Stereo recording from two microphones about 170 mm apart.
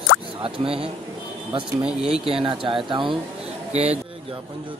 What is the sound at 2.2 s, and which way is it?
Speech, 30° right (ahead or behind).